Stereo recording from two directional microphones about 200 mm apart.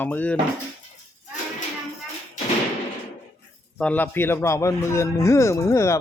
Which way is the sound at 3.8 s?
5° left (ahead or behind).